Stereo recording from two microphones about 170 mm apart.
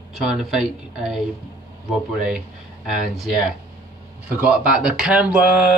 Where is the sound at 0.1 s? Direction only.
Centre (ahead or behind).